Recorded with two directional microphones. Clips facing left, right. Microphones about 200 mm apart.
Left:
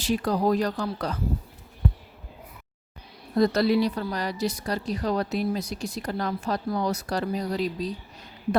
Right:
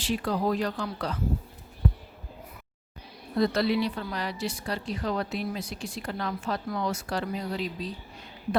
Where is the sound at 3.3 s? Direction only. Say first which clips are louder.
Left 4 dB; 40° left (ahead or behind).